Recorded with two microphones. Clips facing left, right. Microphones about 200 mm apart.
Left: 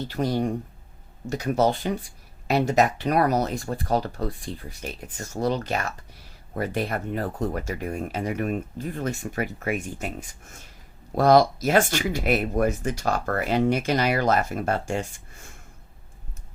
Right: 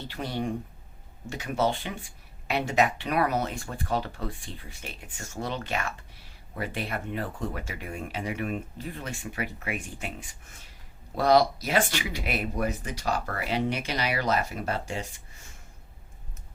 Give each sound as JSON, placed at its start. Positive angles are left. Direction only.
{"t": 0.1, "sound": "speech", "side_deg": 40}